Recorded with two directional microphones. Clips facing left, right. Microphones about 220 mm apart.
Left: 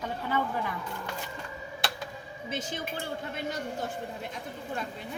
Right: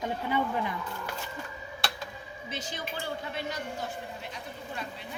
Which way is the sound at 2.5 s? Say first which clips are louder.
Left 4 dB; 50° left (ahead or behind).